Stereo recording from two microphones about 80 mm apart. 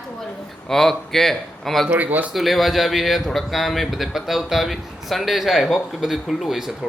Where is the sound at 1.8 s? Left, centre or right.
Right.